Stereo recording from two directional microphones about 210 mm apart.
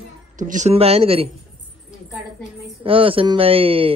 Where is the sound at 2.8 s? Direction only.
25° right (ahead or behind).